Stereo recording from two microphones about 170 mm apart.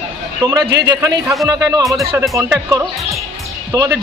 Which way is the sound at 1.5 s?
20° right (ahead or behind).